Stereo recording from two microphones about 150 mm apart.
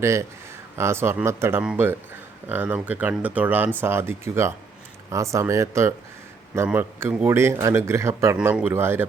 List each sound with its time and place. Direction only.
0.0 s speech: 20° right (ahead or behind)
6.7 s speech: 10° right (ahead or behind)